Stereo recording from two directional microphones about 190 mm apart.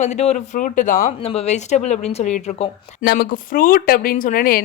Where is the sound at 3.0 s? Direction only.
55° left (ahead or behind).